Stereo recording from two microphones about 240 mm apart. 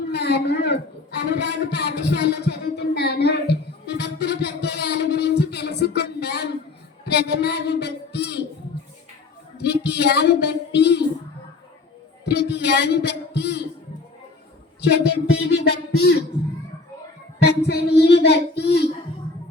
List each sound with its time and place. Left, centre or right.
0.1 s a sound: left
9.6 s a woman's voice: left
12.2 s a man's voice: left
14.8 s a man's voice: left
17.7 s a man's voice: left